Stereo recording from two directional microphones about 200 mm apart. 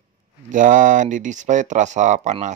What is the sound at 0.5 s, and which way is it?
Speech, 40° right (ahead or behind).